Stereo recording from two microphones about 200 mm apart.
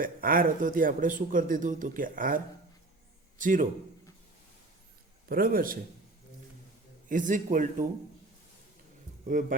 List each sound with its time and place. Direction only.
0.0 s speech: 45° right (ahead or behind)
5.3 s speech: 45° right (ahead or behind)
7.1 s speech: 40° right (ahead or behind)
9.2 s speech: 40° right (ahead or behind)